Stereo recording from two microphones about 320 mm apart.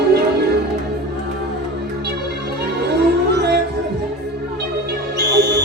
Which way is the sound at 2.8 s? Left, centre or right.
Right.